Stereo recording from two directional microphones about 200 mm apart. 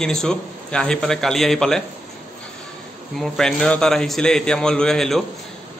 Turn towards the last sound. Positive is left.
turn(degrees=0)  # may be behind; listen again after turning